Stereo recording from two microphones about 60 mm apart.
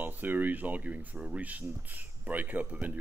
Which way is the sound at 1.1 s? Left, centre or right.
Centre.